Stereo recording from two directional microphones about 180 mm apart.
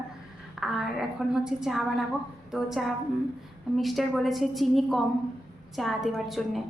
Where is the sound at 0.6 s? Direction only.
Centre (ahead or behind).